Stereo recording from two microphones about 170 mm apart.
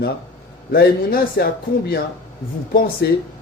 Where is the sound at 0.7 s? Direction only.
65° left (ahead or behind).